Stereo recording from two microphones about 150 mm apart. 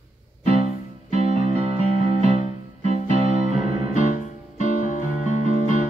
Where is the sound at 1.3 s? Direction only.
45° right (ahead or behind).